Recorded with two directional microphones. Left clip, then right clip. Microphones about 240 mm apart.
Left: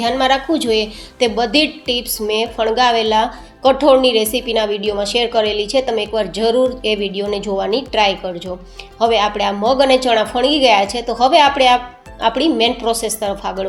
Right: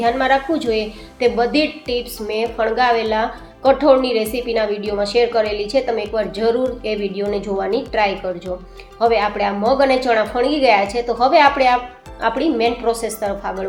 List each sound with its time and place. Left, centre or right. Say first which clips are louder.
0.0 s a woman's voice: left 1 dB; left